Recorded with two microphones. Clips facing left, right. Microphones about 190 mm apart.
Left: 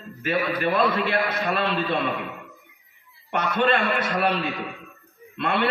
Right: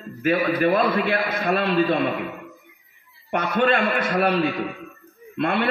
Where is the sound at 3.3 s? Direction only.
50° right (ahead or behind).